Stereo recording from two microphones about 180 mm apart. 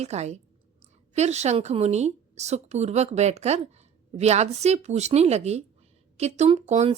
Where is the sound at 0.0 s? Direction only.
40° right (ahead or behind).